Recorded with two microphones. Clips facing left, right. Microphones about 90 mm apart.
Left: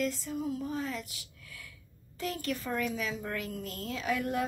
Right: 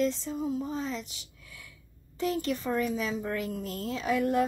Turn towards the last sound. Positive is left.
turn(degrees=-30)  # may be behind; listen again after turning